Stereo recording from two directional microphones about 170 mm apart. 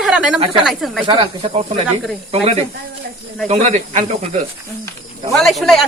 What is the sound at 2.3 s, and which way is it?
Speech, 35° right (ahead or behind).